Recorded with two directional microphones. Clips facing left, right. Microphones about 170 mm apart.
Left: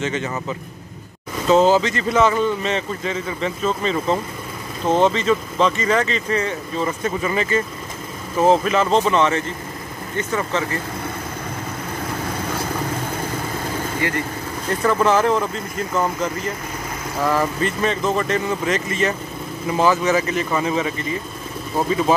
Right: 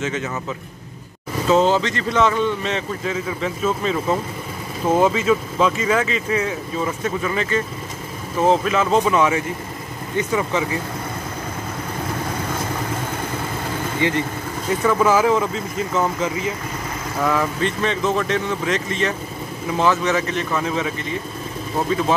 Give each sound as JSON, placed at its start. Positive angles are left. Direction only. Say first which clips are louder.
{"t": 0.0, "sound": "speech", "louder": "left 1 dB", "side_deg": 0}
{"t": 14.0, "sound": "speech", "louder": "right 4 dB", "side_deg": -20}
{"t": 14.7, "sound": "speech", "louder": "even", "side_deg": 0}